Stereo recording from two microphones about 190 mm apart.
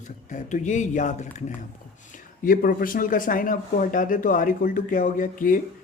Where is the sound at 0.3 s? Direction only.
40° left (ahead or behind).